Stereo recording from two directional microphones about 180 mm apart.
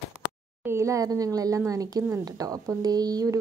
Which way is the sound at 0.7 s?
15° right (ahead or behind).